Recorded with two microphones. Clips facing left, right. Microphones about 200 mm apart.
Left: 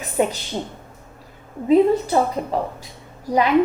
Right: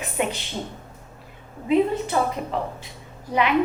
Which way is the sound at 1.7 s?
40° left (ahead or behind).